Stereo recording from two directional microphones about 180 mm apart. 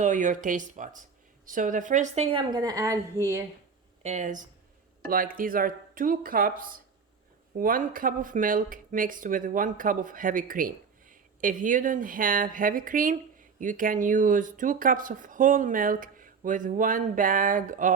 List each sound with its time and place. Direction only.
0.0 s speech: 45° right (ahead or behind)
2.5 s a woman's voice: 20° right (ahead or behind)
4.0 s speech: 40° right (ahead or behind)